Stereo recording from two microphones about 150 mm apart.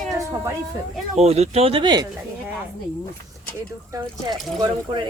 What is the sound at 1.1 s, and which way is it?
Speech, 45° right (ahead or behind).